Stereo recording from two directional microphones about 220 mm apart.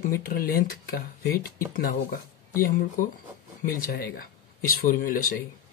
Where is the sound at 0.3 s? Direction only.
40° left (ahead or behind).